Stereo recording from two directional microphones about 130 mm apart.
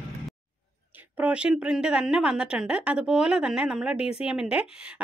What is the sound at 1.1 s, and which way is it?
A woman's voice, 10° right (ahead or behind).